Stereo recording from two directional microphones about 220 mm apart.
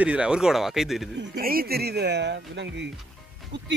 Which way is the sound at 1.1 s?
50° right (ahead or behind).